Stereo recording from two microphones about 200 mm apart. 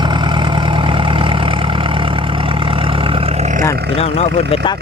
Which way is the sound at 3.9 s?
30° left (ahead or behind).